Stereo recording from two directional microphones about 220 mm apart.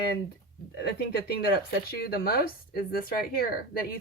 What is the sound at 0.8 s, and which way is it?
Speech, 50° left (ahead or behind).